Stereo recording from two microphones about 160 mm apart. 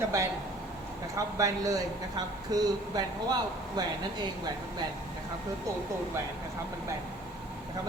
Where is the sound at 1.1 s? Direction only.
20° right (ahead or behind).